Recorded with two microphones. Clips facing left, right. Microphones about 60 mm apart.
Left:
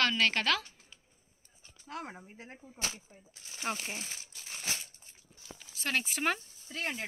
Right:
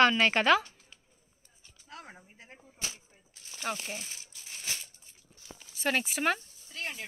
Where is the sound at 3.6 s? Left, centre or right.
Centre.